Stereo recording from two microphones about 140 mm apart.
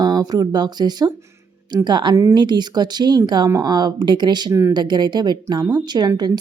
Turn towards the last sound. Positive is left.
turn(degrees=-30)  # may be behind; listen again after turning